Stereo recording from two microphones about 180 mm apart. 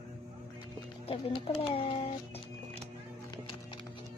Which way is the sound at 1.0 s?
30° left (ahead or behind).